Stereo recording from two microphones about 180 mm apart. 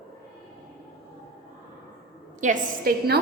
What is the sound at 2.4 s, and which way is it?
Speech, 50° right (ahead or behind).